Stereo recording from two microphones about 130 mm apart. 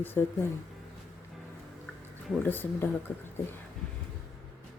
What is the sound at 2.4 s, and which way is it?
Speech, 15° left (ahead or behind).